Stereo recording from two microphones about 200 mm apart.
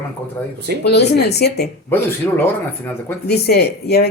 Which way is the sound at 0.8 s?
55° left (ahead or behind).